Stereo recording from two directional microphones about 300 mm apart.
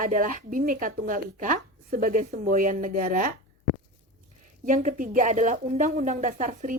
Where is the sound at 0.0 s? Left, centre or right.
Right.